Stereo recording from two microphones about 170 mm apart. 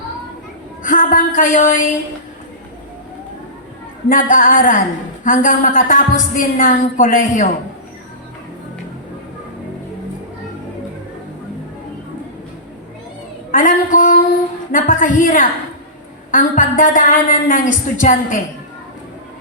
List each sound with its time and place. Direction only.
0.8 s a woman's voice: 55° left (ahead or behind)
4.1 s a woman's voice: 50° left (ahead or behind)
13.5 s a woman's voice: 50° left (ahead or behind)